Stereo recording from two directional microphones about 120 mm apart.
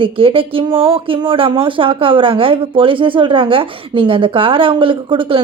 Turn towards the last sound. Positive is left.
turn(degrees=-45)  # may be behind; listen again after turning